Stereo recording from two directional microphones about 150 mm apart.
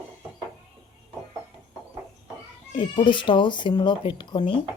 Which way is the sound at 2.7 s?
35° left (ahead or behind).